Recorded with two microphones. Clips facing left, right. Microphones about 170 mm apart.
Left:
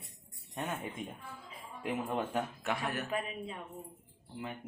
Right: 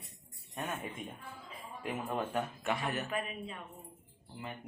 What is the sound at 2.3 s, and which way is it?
Speech, centre (ahead or behind).